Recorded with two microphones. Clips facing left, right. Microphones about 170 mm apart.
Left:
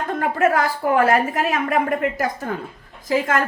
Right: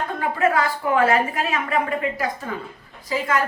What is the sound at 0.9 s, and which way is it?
A woman's voice, 45° left (ahead or behind).